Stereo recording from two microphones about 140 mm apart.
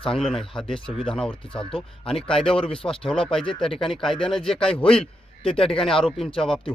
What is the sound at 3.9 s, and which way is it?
Speech, centre (ahead or behind).